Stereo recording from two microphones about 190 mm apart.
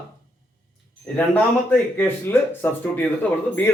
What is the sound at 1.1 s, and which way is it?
Speech, 10° left (ahead or behind).